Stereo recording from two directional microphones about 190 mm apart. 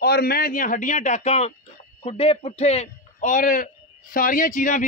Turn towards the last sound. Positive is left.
turn(degrees=45)  # may be behind; listen again after turning